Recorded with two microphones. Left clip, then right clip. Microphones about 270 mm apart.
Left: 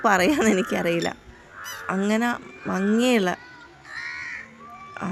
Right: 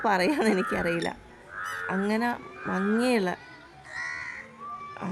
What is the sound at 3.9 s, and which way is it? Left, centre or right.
Crow, centre.